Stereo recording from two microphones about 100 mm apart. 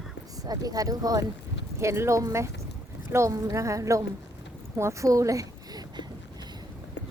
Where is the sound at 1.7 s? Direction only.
25° right (ahead or behind).